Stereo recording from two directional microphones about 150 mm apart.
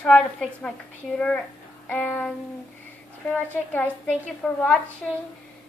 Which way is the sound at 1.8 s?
10° left (ahead or behind).